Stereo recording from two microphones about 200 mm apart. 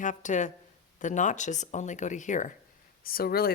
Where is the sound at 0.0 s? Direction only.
40° left (ahead or behind).